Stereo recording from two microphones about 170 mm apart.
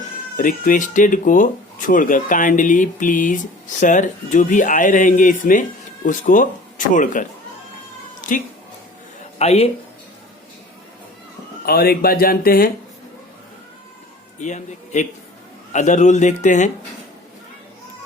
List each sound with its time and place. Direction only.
0.3 s speech: 50° left (ahead or behind)
8.3 s speech: 50° left (ahead or behind)
9.4 s speech: 35° left (ahead or behind)
11.6 s speech: 65° left (ahead or behind)
14.4 s speech: 45° left (ahead or behind)